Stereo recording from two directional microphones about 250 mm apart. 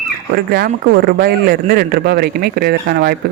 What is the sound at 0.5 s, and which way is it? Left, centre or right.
A man's voice, right.